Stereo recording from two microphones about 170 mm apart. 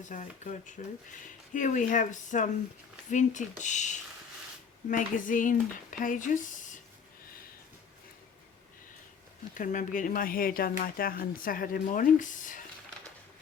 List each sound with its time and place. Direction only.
0.1 s speech: 50° left (ahead or behind)
9.6 s speech: 50° left (ahead or behind)